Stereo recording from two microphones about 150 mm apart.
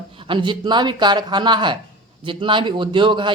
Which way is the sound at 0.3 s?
30° right (ahead or behind).